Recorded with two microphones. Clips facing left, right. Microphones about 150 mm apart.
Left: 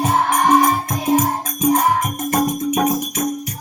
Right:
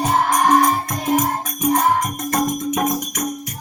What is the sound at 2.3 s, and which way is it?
Music, 20° left (ahead or behind).